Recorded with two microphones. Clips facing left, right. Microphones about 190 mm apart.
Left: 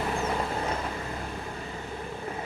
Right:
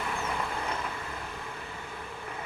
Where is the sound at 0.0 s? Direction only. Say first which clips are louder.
Left 5 dB; 35° left (ahead or behind).